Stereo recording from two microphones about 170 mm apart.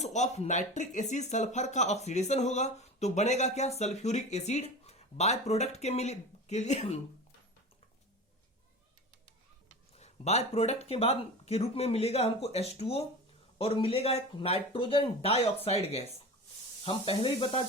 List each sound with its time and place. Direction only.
0.0 s speech: 40° left (ahead or behind)
10.0 s speech: 40° left (ahead or behind)